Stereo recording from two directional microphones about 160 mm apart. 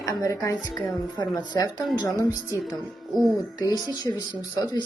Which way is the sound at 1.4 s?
25° left (ahead or behind).